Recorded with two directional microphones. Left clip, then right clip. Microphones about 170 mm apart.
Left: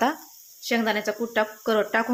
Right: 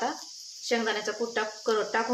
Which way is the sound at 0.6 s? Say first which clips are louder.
Left 4 dB; 50° left (ahead or behind).